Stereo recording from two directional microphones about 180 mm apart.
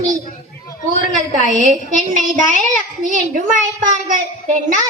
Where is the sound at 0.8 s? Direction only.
45° right (ahead or behind).